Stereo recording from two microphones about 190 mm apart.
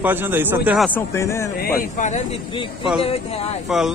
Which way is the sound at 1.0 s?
15° left (ahead or behind).